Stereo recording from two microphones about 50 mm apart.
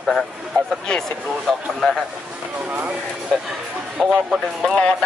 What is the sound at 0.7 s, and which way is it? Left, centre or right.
Speech, centre.